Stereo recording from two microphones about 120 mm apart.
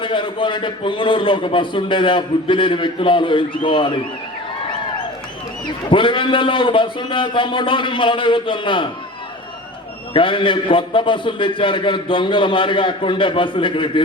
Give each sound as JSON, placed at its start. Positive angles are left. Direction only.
{"t": 0.0, "sound": "a man's voice", "side_deg": 45}
{"t": 5.9, "sound": "a man's voice", "side_deg": 45}
{"t": 10.2, "sound": "a man's voice", "side_deg": 45}